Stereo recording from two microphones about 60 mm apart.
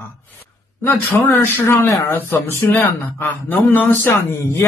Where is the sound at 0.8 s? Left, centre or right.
Left.